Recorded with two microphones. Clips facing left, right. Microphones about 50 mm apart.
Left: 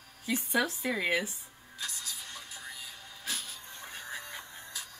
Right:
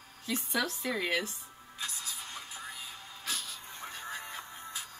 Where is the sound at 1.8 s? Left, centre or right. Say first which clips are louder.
Even; right.